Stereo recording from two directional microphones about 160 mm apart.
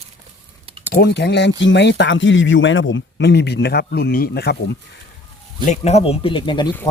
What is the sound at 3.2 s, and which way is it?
Speech, 90° left.